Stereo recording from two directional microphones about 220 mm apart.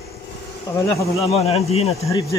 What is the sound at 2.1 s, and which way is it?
Speech, 15° left (ahead or behind).